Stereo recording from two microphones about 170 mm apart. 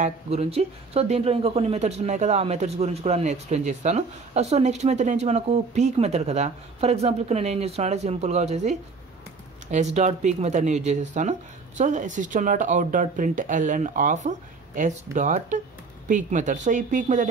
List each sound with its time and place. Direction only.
0.0 s speech: 40° right (ahead or behind)